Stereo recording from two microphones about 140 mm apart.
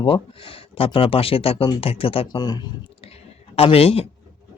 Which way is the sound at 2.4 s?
30° left (ahead or behind).